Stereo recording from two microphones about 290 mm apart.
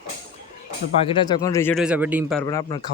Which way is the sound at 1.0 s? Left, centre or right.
Centre.